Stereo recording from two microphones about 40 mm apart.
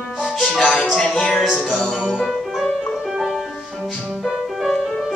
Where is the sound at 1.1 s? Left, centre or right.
Centre.